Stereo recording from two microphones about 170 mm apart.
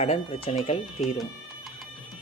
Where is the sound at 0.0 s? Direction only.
35° left (ahead or behind).